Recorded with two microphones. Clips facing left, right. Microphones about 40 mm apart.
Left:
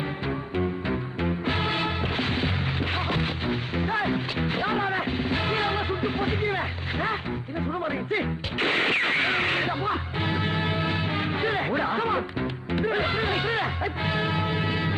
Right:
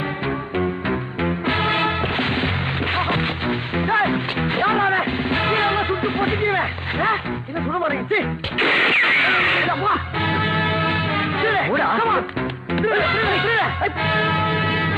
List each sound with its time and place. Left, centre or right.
0.5 s music: right